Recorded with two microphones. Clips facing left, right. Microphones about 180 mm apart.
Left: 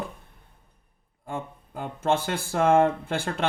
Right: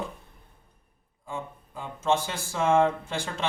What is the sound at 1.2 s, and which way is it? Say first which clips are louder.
Speech: left 2 dB; 60° left (ahead or behind).